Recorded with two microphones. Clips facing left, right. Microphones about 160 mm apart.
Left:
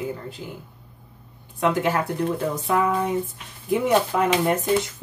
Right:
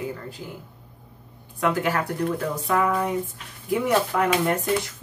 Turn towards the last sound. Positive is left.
turn(degrees=20)  # may be behind; listen again after turning